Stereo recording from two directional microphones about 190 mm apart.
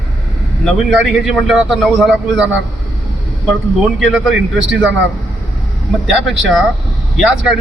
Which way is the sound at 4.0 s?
Centre (ahead or behind).